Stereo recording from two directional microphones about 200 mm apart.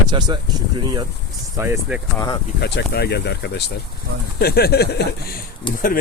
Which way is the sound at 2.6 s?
55° left (ahead or behind).